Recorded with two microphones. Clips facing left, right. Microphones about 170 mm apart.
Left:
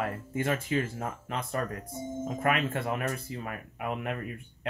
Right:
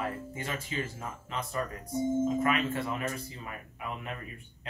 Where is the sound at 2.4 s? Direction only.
55° left (ahead or behind).